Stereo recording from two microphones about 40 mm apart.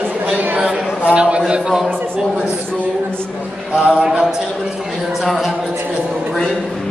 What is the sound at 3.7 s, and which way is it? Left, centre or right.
Speech, right.